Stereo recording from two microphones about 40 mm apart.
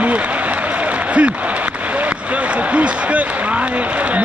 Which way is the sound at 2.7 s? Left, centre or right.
Right.